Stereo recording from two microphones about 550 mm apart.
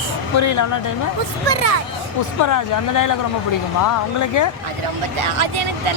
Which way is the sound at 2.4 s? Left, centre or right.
Left.